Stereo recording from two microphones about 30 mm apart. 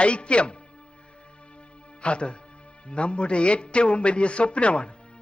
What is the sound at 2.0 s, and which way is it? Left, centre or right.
A man's voice, left.